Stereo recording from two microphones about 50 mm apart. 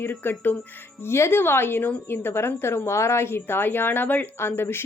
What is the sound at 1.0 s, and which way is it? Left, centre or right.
Speech, left.